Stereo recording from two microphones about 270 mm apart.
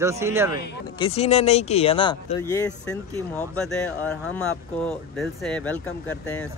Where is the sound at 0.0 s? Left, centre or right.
Centre.